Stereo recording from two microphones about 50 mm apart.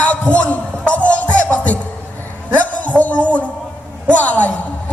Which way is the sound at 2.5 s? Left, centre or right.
Left.